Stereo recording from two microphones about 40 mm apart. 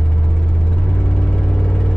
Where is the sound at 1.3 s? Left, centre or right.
Left.